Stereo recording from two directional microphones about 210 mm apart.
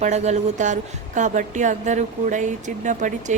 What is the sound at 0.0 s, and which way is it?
A woman's voice, 35° right (ahead or behind).